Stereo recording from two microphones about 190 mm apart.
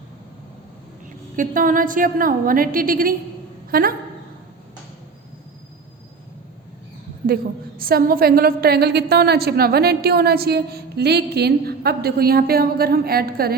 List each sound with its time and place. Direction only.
1.4 s a woman's voice: 45° right (ahead or behind)
7.8 s a woman's voice: 50° right (ahead or behind)